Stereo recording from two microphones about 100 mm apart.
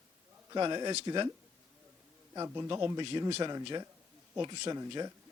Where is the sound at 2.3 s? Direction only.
30° right (ahead or behind).